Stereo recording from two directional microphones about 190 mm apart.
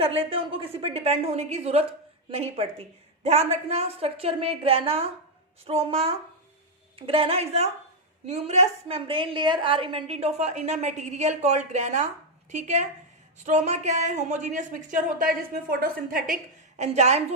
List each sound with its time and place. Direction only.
0.0 s a woman's voice: 30° right (ahead or behind)
16.7 s a woman's voice: 35° right (ahead or behind)